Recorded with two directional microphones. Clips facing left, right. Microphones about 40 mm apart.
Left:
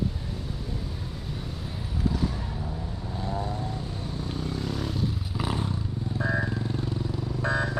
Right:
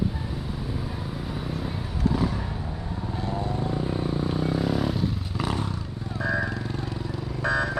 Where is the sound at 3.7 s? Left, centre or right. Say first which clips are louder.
Right 8 dB; right; by 5.6 s centre.